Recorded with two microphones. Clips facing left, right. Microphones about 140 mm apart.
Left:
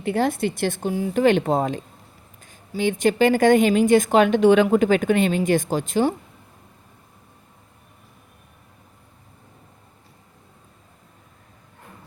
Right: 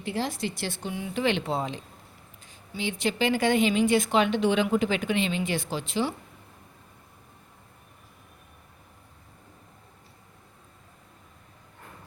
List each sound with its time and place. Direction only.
0.0 s speech: 55° left (ahead or behind)